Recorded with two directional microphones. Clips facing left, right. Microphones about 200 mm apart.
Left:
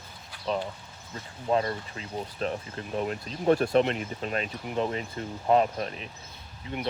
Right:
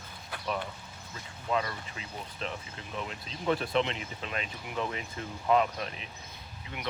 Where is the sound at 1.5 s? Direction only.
35° left (ahead or behind).